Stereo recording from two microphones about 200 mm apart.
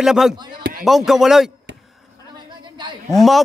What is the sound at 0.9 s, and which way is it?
Speech, centre (ahead or behind).